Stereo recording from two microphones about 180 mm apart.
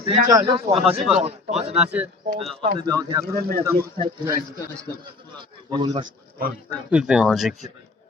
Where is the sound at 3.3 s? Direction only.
60° right (ahead or behind).